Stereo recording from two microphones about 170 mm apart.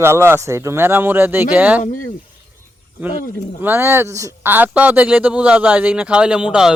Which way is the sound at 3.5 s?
10° right (ahead or behind).